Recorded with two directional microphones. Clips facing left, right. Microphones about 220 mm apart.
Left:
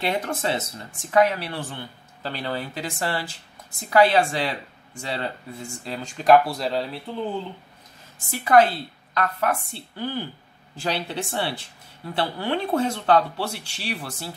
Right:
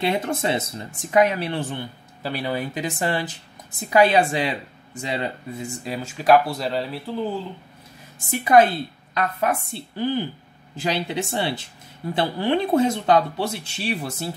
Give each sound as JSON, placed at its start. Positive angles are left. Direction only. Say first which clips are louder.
{"t": 0.0, "sound": "speech", "louder": "right 3 dB", "side_deg": -20}
{"t": 8.3, "sound": "speech", "louder": "right 2 dB", "side_deg": -15}